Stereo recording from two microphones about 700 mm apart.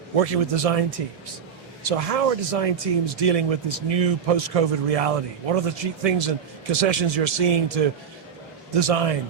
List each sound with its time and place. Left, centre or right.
0.2 s speech: right